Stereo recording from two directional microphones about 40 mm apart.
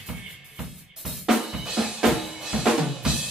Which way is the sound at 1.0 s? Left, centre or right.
Centre.